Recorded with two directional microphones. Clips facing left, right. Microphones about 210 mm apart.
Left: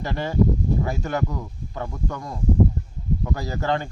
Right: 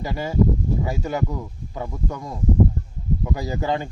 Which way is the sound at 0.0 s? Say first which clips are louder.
Right 1 dB; 5° right (ahead or behind).